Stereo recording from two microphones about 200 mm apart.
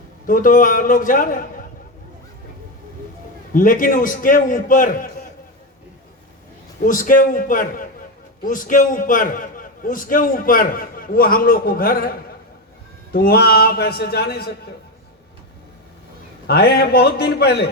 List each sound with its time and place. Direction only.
0.3 s a man's voice: 45° left (ahead or behind)
3.5 s a man's voice: 40° left (ahead or behind)
6.8 s a man's voice: 40° left (ahead or behind)
13.1 s a man's voice: 50° left (ahead or behind)
16.5 s a man's voice: 50° left (ahead or behind)